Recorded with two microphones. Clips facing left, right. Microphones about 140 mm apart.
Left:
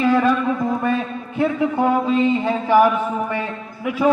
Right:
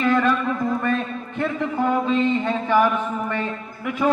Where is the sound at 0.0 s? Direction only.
10° left (ahead or behind).